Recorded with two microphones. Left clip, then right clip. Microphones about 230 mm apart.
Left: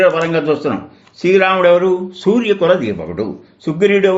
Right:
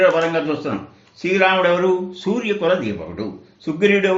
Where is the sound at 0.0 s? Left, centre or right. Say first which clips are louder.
Left 3 dB; left.